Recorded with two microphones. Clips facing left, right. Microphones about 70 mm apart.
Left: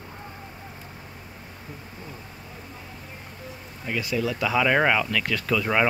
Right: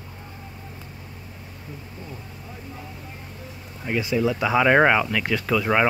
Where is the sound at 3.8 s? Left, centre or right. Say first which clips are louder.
Right 4 dB; centre.